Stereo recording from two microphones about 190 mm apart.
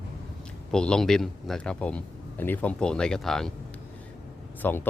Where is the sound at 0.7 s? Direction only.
5° left (ahead or behind).